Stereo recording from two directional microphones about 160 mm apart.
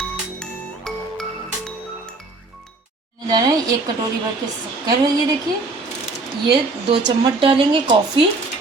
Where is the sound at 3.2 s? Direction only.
25° right (ahead or behind).